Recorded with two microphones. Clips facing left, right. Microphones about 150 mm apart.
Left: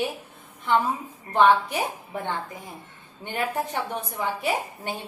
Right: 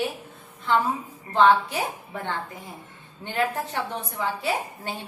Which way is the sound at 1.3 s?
15° left (ahead or behind).